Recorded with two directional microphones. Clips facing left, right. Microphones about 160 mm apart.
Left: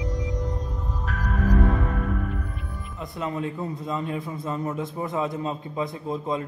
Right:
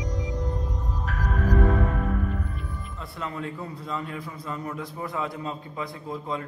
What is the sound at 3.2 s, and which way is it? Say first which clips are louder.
A man's voice: left 4 dB; 20° left (ahead or behind).